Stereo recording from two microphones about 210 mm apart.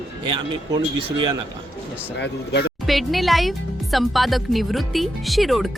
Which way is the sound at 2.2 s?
55° left (ahead or behind).